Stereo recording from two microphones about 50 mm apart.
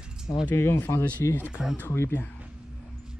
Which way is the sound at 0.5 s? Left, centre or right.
Left.